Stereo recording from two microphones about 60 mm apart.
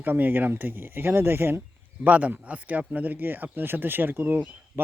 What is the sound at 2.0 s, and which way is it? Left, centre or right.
Speech, right.